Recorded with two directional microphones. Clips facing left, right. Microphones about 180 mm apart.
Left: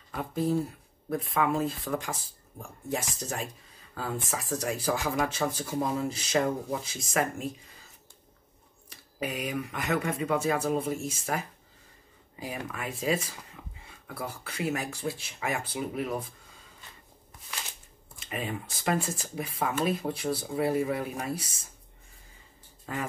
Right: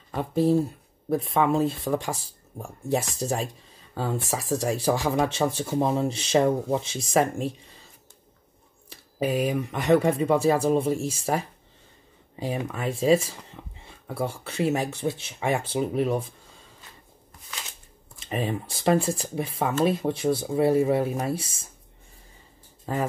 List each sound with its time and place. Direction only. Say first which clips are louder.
0.1 s speech: right 6 dB; 30° right (ahead or behind)
2.5 s speech: right 6 dB; 45° right (ahead or behind)
3.2 s speech: right 7 dB; 30° right (ahead or behind)
4.2 s speech: right 6 dB; centre (ahead or behind)
4.6 s speech: right 5 dB; 30° right (ahead or behind)
8.9 s speech: right 9 dB; 30° right (ahead or behind)
18.5 s speech: right 7 dB; 30° right (ahead or behind)